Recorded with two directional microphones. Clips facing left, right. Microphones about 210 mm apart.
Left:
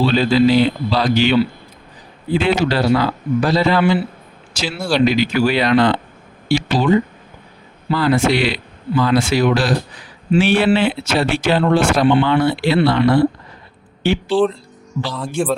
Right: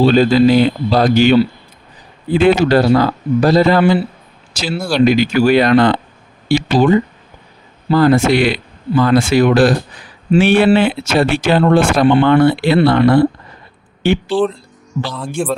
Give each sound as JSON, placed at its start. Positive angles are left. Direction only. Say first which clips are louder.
{"t": 0.0, "sound": "a man's voice", "louder": "right 4 dB", "side_deg": -45}
{"t": 7.9, "sound": "speech", "louder": "right 5 dB", "side_deg": -45}
{"t": 15.4, "sound": "speech", "louder": "even", "side_deg": 0}